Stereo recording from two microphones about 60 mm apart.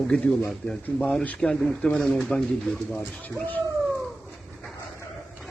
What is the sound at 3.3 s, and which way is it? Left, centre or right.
Speech, left.